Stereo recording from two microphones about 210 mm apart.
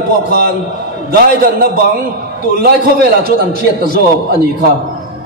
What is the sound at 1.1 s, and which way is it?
A man's voice, 45° right (ahead or behind).